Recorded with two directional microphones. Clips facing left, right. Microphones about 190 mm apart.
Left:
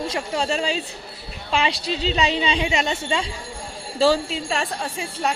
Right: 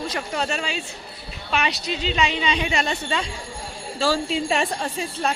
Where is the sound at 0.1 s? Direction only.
30° left (ahead or behind).